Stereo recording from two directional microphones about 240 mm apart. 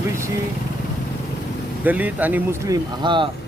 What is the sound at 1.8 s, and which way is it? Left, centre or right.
Speech, centre.